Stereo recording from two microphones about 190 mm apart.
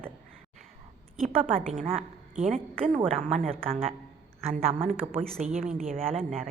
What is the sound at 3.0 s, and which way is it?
Speech, 30° right (ahead or behind).